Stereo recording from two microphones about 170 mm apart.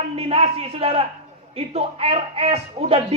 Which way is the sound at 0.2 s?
35° right (ahead or behind).